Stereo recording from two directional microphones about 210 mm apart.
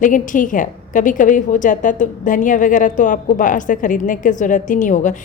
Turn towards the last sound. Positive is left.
turn(degrees=35)  # may be behind; listen again after turning